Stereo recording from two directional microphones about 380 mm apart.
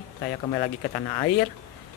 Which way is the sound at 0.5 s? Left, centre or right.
Centre.